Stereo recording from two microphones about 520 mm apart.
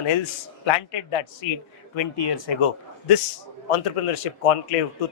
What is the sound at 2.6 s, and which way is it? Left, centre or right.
A man's voice, left.